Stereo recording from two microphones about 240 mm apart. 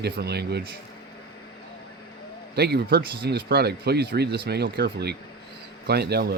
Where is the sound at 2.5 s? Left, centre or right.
Right.